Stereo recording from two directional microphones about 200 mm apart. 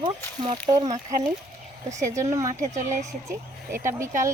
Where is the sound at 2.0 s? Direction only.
15° right (ahead or behind).